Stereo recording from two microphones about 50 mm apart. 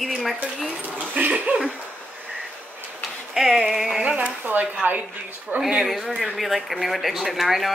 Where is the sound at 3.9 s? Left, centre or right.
Right.